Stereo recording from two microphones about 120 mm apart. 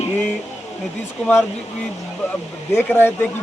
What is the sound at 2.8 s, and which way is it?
Speech, 20° left (ahead or behind).